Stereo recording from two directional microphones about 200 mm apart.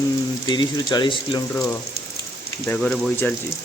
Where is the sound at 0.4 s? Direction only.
20° left (ahead or behind).